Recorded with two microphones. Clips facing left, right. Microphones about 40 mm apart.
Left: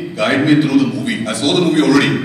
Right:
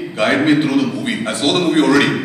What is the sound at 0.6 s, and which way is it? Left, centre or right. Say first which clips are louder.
A man's voice: left 2 dB; right.